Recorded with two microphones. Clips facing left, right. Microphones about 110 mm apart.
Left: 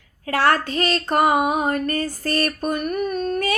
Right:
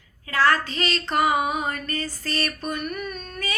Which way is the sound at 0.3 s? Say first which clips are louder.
Left 2 dB; 60° left (ahead or behind).